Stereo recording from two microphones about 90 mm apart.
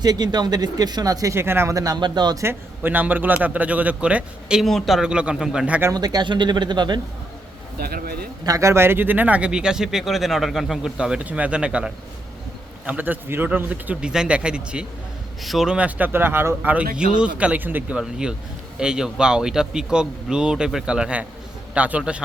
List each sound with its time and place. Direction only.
0.0 s speech: 50° right (ahead or behind); by 1.7 s 25° right (ahead or behind)
1.7 s speech: 40° right (ahead or behind)
2.4 s a man's voice: 25° right (ahead or behind)
4.6 s a man's voice: centre (ahead or behind)
5.9 s speech: 50° right (ahead or behind)
8.4 s a man's voice: 35° right (ahead or behind)
17.2 s a man's voice: 15° right (ahead or behind)
17.9 s a man's voice: 10° right (ahead or behind)